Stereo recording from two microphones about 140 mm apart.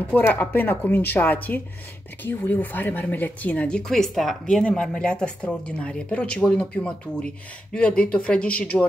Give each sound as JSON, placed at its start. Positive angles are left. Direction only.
{"t": 0.0, "sound": "speech", "side_deg": 10}